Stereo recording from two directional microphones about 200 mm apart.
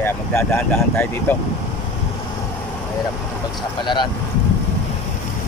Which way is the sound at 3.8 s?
25° left (ahead or behind).